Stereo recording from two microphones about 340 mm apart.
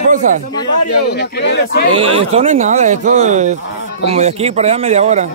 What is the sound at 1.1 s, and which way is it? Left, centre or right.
Speech, left.